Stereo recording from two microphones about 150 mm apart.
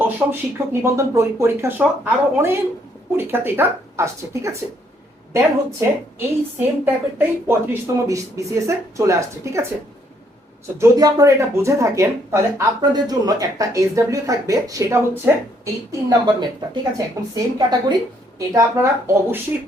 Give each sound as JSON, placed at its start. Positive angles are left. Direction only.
{"t": 0.0, "sound": "speech", "side_deg": -15}
{"t": 5.8, "sound": "speech", "side_deg": -15}
{"t": 10.8, "sound": "speech", "side_deg": -20}